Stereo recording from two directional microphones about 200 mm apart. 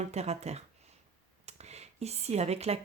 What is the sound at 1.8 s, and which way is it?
Speech, 30° right (ahead or behind).